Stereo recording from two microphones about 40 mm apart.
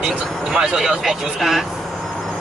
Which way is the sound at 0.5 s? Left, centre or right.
Right.